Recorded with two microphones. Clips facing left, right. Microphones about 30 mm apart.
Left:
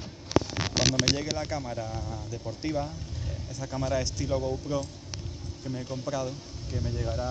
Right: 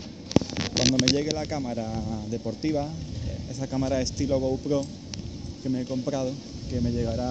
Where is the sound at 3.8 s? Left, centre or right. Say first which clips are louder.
Right 3 dB; right.